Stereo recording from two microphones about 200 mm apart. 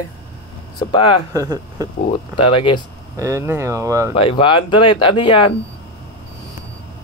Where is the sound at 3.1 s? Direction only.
15° right (ahead or behind).